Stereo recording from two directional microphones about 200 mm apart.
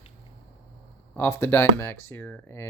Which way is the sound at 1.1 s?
10° left (ahead or behind).